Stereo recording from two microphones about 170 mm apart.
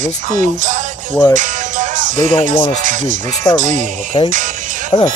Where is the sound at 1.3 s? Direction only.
50° right (ahead or behind).